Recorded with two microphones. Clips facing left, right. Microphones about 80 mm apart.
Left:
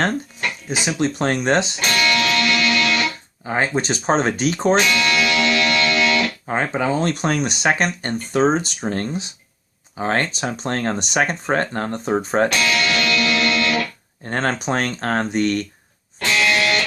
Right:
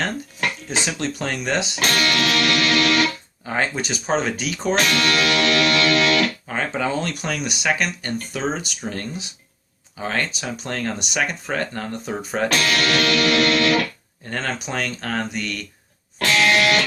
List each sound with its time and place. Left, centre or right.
0.7 s speech: centre
1.2 s speech: left
1.8 s music: right
3.4 s speech: centre
3.8 s speech: left
4.8 s music: right
6.5 s speech: left
12.5 s speech: right
14.3 s speech: left
16.1 s music: right